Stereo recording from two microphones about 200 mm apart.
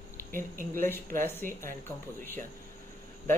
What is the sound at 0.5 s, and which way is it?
Speech, 45° right (ahead or behind).